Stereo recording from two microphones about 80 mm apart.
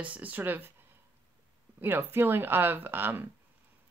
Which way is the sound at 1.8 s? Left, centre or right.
Right.